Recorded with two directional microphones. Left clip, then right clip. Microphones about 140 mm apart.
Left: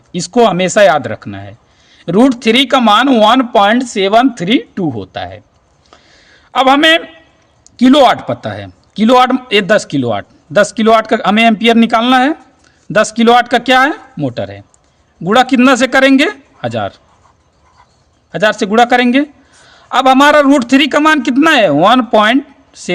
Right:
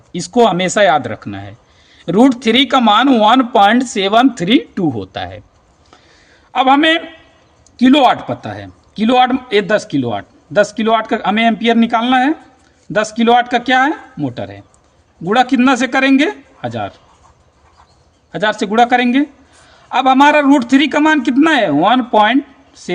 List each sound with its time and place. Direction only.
0.1 s speech: 40° left (ahead or behind); by 5.4 s 10° left (ahead or behind)
5.9 s a sound: 45° left (ahead or behind)
7.8 s a woman's voice: 55° left (ahead or behind)
18.3 s a woman's voice: 50° left (ahead or behind); by 22.9 s 65° left (ahead or behind)